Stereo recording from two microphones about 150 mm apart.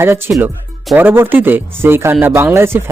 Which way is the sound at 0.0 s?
15° right (ahead or behind).